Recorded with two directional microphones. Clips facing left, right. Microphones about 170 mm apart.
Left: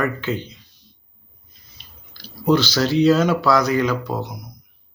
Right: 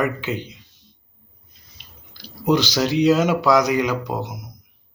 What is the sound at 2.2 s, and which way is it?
Speech, 15° right (ahead or behind).